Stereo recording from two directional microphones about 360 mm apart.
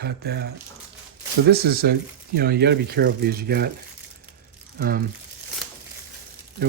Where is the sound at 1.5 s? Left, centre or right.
Right.